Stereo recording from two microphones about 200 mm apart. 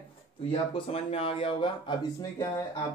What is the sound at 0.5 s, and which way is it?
Speech, 30° left (ahead or behind).